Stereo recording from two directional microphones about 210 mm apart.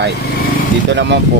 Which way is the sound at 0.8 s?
55° right (ahead or behind).